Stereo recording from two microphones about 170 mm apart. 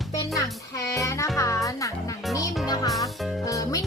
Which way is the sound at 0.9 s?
20° left (ahead or behind).